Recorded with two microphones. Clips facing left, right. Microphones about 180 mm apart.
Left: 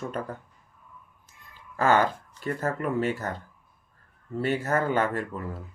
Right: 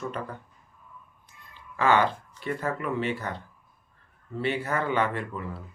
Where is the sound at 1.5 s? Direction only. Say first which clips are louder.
Left 1 dB; 45° left (ahead or behind).